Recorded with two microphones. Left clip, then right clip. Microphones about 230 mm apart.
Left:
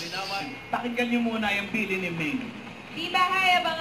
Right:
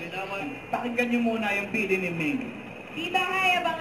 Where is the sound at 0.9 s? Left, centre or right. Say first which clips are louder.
Right 3 dB; centre.